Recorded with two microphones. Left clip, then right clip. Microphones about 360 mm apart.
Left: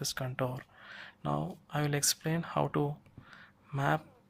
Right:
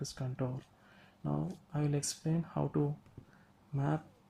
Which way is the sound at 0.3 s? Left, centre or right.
Left.